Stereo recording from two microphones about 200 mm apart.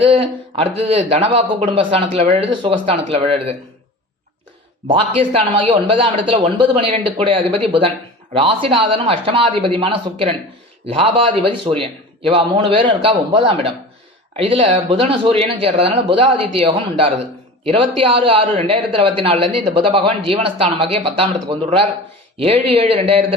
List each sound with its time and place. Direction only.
0.5 s speech: 30° right (ahead or behind)
4.9 s speech: 25° right (ahead or behind)